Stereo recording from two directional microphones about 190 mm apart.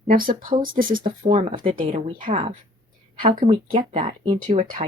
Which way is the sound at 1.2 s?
35° right (ahead or behind).